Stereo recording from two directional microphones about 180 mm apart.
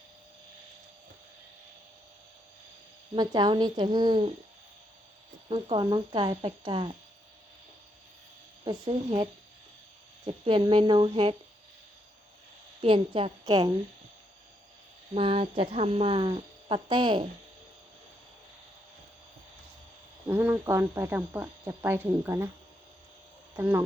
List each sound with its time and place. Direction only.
3.2 s speech: 25° right (ahead or behind)
5.5 s speech: 30° right (ahead or behind)
8.6 s speech: 25° right (ahead or behind)
12.8 s speech: 30° right (ahead or behind)
15.1 s speech: 30° right (ahead or behind)
20.2 s speech: 10° right (ahead or behind)
23.6 s speech: 10° right (ahead or behind)